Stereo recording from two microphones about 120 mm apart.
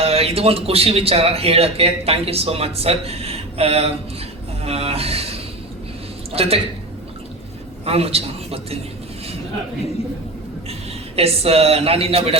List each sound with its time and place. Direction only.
0.0 s speech: 55° right (ahead or behind)
7.9 s a man's voice: 55° right (ahead or behind)
11.2 s speech: 55° right (ahead or behind)